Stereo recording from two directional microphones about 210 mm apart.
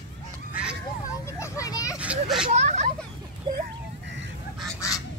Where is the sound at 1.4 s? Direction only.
15° left (ahead or behind).